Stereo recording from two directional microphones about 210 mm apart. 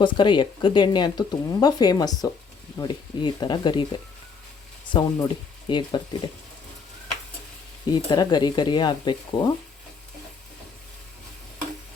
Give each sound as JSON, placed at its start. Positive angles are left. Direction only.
{"t": 0.0, "sound": "speech", "side_deg": 20}
{"t": 4.9, "sound": "speech", "side_deg": 25}
{"t": 7.9, "sound": "speech", "side_deg": 20}